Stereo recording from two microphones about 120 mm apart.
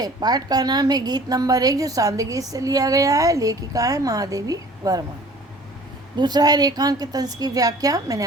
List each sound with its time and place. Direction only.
0.0 s a woman's voice: 35° right (ahead or behind)
6.1 s a woman's voice: 35° right (ahead or behind)